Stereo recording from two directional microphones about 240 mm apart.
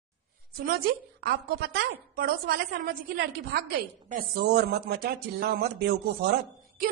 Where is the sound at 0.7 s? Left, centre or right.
Right.